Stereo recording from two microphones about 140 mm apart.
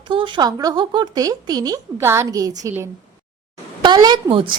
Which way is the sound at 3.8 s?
30° right (ahead or behind).